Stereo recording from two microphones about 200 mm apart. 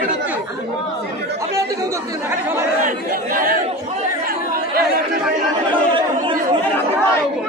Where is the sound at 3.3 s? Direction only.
45° right (ahead or behind).